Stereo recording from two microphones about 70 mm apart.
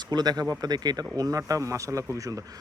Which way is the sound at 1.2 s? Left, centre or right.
Right.